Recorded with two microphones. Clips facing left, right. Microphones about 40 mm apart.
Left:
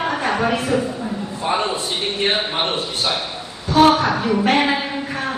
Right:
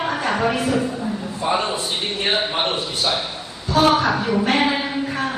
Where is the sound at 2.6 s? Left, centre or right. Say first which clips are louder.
Even; left.